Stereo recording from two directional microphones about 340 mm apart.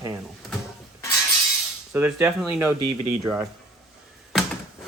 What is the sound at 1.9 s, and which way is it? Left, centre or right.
Speech, centre.